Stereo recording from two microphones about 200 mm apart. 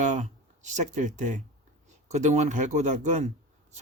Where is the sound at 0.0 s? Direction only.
40° right (ahead or behind).